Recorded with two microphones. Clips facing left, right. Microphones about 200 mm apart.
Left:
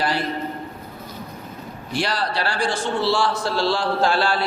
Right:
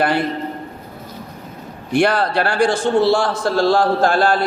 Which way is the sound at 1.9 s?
55° right (ahead or behind).